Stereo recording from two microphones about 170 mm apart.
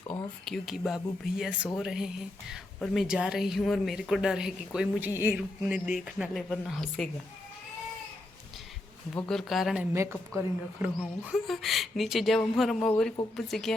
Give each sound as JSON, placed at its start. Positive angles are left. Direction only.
{"t": 0.4, "sound": "speech", "side_deg": 0}
{"t": 9.1, "sound": "speech", "side_deg": 5}
{"t": 9.9, "sound": "speech", "side_deg": -15}